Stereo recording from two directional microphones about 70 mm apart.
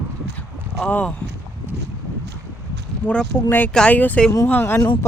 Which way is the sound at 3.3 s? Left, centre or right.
Left.